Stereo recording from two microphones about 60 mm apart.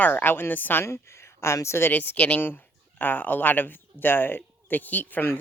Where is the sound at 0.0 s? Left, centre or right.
Left.